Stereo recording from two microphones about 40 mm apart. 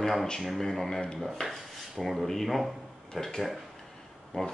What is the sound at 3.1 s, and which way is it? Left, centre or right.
Speech, centre.